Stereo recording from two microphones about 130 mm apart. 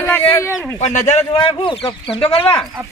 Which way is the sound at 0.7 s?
65° left (ahead or behind).